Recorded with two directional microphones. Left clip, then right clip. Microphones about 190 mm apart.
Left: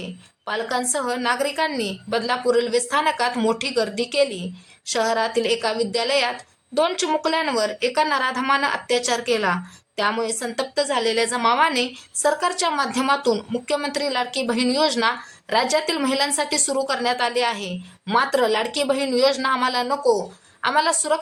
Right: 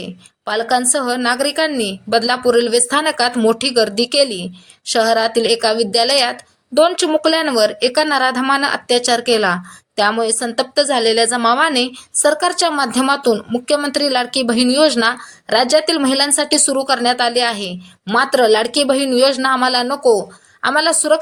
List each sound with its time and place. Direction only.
0.0 s a woman's voice: 25° right (ahead or behind)